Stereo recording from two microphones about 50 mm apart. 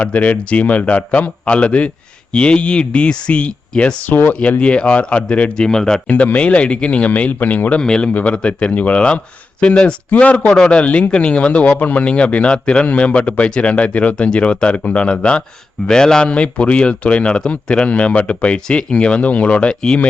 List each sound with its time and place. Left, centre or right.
0.0 s a man's voice: left
5.5 s speech: centre
6.1 s a man's voice: left
7.8 s a man's voice: centre
10.5 s speech: centre
10.8 s a man's voice: left